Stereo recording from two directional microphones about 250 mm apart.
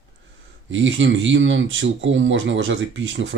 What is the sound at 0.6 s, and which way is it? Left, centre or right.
Speech, right.